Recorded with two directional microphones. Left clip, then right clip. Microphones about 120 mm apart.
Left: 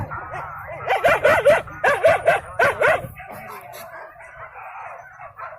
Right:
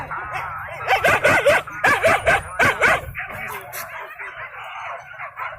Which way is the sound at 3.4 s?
20° right (ahead or behind).